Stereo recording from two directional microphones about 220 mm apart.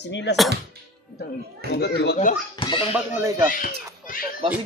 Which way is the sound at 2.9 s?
10° right (ahead or behind).